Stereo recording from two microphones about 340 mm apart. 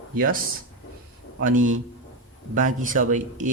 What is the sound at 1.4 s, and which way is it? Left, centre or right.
Speech, right.